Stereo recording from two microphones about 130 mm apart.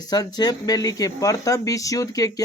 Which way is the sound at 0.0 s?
30° left (ahead or behind).